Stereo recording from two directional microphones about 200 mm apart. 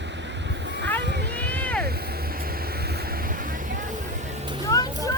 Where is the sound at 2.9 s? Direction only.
50° right (ahead or behind).